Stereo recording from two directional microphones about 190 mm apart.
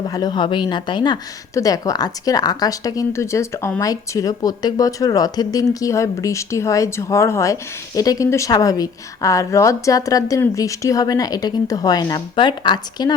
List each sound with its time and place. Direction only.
0.1 s speech: 20° left (ahead or behind)